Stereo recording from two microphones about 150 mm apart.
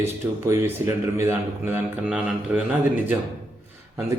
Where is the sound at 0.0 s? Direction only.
20° right (ahead or behind).